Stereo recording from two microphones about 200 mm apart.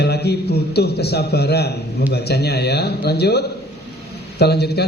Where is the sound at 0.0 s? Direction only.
55° left (ahead or behind).